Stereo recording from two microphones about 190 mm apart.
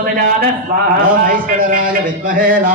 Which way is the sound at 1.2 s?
45° right (ahead or behind).